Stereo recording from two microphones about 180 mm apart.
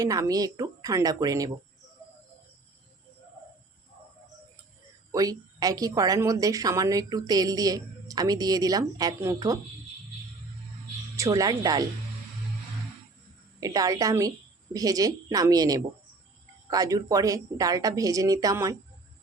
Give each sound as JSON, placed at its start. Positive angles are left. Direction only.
{"t": 0.0, "sound": "a woman's voice", "side_deg": -20}
{"t": 5.1, "sound": "a woman's voice", "side_deg": -20}
{"t": 11.2, "sound": "a woman's voice", "side_deg": -20}
{"t": 13.6, "sound": "a woman's voice", "side_deg": -20}